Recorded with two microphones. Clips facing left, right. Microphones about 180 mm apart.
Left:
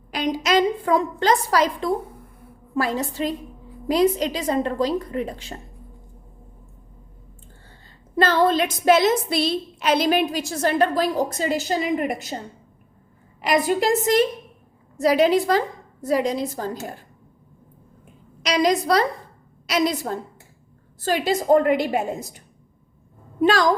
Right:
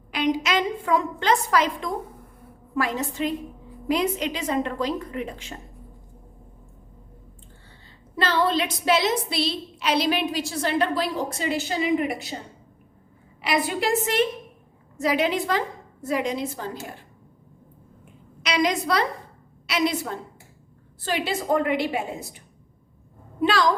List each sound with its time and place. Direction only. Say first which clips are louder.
0.1 s a woman's voice: left 2 dB; 40° left (ahead or behind)
8.1 s a woman's voice: left 4 dB; 45° left (ahead or behind)
13.4 s a woman's voice: left 4 dB; 40° left (ahead or behind)
18.4 s a woman's voice: left 4 dB; 35° left (ahead or behind)